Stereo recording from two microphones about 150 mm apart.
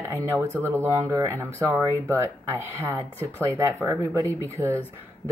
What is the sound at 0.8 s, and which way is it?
Speech, 20° right (ahead or behind).